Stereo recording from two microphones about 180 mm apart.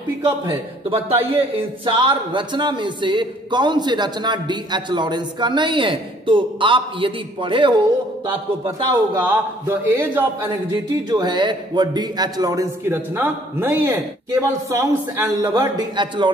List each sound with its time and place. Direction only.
0.5 s a man's voice: 30° right (ahead or behind)
9.7 s a man's voice: 15° right (ahead or behind)
11.1 s speech: 25° right (ahead or behind)